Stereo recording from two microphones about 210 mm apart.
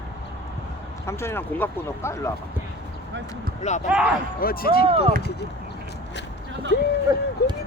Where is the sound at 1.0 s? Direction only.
10° left (ahead or behind).